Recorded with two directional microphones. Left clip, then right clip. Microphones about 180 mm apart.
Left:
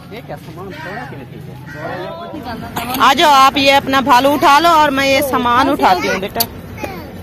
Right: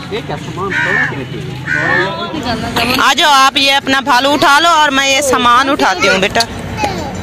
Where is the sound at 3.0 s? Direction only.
Centre (ahead or behind).